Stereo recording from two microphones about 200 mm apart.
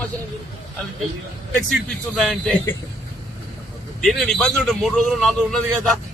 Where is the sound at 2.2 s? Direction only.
Centre (ahead or behind).